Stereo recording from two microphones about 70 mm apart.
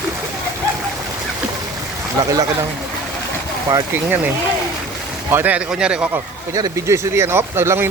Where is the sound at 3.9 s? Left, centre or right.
Right.